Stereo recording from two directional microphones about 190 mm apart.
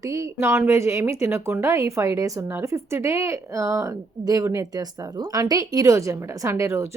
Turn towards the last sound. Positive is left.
turn(degrees=-15)  # may be behind; listen again after turning